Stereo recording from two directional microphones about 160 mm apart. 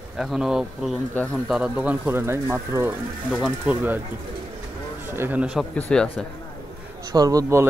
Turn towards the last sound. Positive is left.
turn(degrees=-20)  # may be behind; listen again after turning